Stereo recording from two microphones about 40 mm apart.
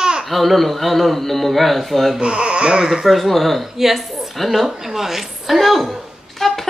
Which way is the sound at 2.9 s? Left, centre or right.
Centre.